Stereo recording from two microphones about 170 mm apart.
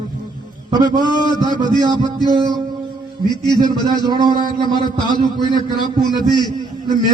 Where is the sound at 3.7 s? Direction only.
25° left (ahead or behind).